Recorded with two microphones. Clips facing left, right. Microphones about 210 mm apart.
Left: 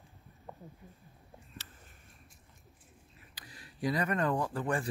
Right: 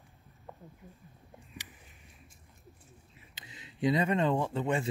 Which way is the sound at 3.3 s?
20° right (ahead or behind).